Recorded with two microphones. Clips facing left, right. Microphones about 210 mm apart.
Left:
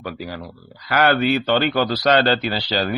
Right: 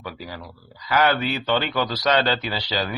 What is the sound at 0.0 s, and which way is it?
Speech, 60° left (ahead or behind).